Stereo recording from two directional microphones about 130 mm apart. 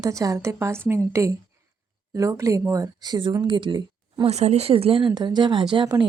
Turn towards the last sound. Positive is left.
turn(degrees=-35)  # may be behind; listen again after turning